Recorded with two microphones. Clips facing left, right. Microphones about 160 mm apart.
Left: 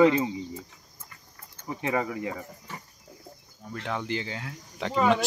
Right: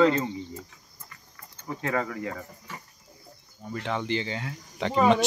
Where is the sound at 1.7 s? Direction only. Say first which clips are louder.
Left 1 dB; 20° left (ahead or behind).